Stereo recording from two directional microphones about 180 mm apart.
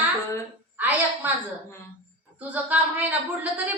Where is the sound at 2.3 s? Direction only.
10° right (ahead or behind).